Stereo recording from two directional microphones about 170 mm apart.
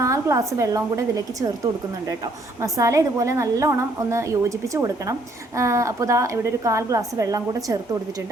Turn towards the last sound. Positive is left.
turn(degrees=-20)  # may be behind; listen again after turning